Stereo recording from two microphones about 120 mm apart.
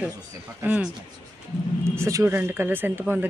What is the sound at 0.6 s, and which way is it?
Speech, 10° right (ahead or behind).